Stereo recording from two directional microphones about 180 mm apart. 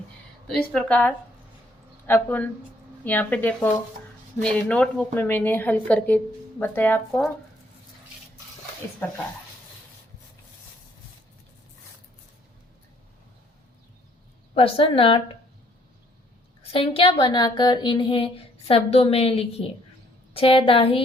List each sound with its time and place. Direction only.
0.4 s a woman's voice: 5° left (ahead or behind)
9.0 s a woman's voice: 10° left (ahead or behind)
14.5 s a woman's voice: 30° left (ahead or behind)
16.7 s a woman's voice: 30° left (ahead or behind)